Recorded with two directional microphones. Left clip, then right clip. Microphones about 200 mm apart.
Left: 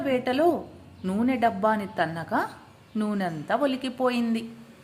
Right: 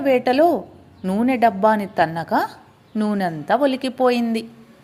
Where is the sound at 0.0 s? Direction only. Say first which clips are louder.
Right 8 dB; 25° right (ahead or behind).